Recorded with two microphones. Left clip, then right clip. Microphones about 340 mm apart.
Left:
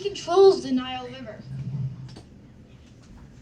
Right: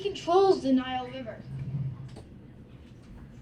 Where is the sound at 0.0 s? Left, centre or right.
Left.